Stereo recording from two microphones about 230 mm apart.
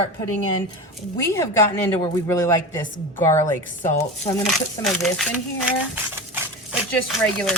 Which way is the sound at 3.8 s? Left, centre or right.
Left.